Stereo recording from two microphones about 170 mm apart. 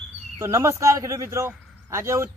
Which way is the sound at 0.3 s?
15° right (ahead or behind).